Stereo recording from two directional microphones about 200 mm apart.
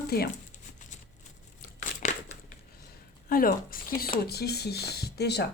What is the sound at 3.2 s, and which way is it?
Speech, 45° left (ahead or behind).